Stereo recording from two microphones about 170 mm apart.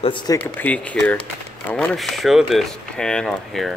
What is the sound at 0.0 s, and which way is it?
Speech, 30° left (ahead or behind).